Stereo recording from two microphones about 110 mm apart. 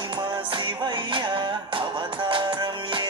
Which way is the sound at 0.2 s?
45° right (ahead or behind).